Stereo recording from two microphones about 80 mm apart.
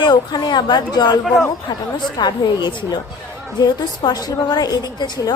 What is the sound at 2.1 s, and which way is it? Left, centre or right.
A woman's voice, left.